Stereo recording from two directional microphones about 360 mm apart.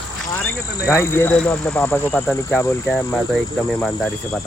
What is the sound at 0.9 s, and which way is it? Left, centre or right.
Speech, centre.